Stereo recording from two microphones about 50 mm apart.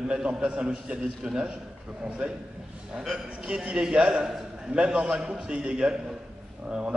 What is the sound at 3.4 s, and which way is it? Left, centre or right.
A man's voice, right.